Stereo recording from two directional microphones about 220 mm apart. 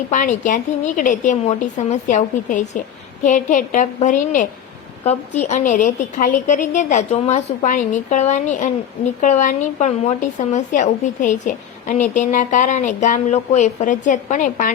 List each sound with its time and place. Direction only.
0.1 s speech: 35° left (ahead or behind)